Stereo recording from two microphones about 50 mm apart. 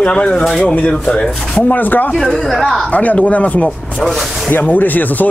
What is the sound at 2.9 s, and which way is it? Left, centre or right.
Speech, left.